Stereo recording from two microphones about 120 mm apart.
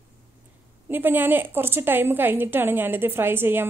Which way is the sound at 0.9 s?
15° right (ahead or behind).